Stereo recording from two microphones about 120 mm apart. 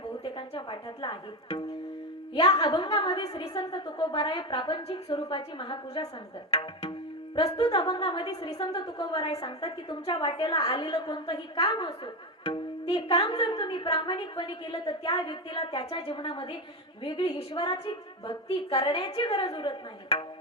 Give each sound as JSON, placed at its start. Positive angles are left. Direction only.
{"t": 0.3, "sound": "a woman's voice", "side_deg": 45}
{"t": 7.6, "sound": "a woman's voice", "side_deg": 40}
{"t": 8.0, "sound": "a woman's voice", "side_deg": 50}
{"t": 11.7, "sound": "a woman's voice", "side_deg": 35}
{"t": 12.5, "sound": "music", "side_deg": 50}
{"t": 13.2, "sound": "a woman's voice", "side_deg": 35}